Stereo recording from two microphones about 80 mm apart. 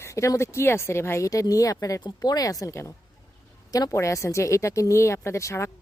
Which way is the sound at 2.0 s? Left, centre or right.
Left.